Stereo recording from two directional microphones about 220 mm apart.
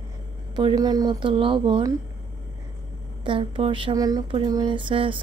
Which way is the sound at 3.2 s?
25° right (ahead or behind).